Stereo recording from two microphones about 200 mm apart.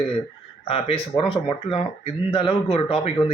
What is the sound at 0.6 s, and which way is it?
Speech, 30° left (ahead or behind).